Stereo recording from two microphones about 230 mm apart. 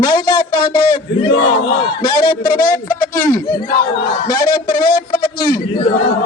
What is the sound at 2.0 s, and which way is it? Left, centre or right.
A man's voice, left.